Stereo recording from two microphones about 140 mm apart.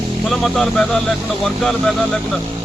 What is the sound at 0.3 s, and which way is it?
Speech, centre (ahead or behind).